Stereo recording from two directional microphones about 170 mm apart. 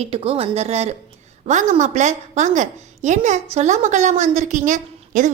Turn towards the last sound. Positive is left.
turn(degrees=-50)  # may be behind; listen again after turning